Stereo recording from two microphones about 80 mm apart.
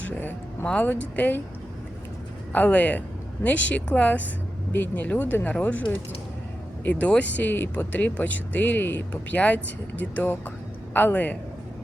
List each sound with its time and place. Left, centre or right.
0.6 s speech: centre
2.5 s speech: left
6.8 s speech: centre